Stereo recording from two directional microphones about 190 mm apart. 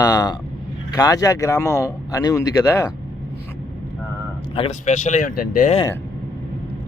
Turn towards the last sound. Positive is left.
turn(degrees=45)  # may be behind; listen again after turning